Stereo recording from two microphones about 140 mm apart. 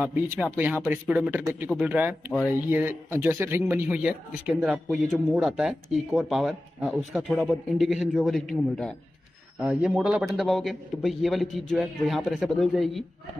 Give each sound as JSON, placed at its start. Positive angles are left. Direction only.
{"t": 0.0, "sound": "speech", "side_deg": -10}